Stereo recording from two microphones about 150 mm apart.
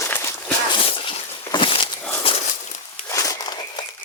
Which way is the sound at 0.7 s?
35° left (ahead or behind).